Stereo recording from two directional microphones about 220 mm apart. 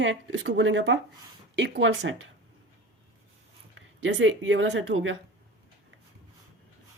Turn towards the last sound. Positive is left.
turn(degrees=-60)  # may be behind; listen again after turning